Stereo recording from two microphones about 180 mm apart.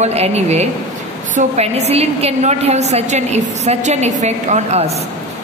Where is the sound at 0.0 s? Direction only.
35° right (ahead or behind).